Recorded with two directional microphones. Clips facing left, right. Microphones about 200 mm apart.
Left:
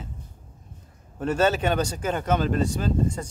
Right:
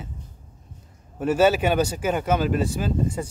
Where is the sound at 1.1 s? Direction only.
10° right (ahead or behind).